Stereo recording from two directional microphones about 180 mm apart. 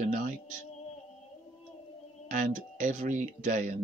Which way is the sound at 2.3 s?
50° right (ahead or behind).